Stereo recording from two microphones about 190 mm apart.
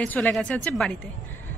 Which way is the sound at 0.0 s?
5° left (ahead or behind).